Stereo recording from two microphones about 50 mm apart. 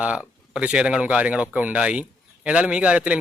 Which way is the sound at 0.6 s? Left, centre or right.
Centre.